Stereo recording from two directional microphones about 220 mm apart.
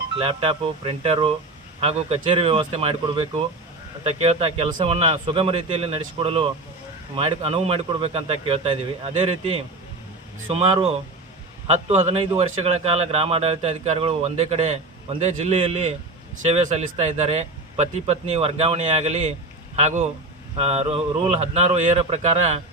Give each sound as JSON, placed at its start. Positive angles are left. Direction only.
{"t": 0.2, "sound": "a man's voice", "side_deg": -25}